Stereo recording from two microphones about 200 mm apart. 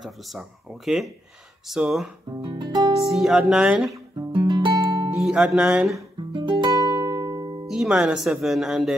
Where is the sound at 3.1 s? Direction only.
Centre (ahead or behind).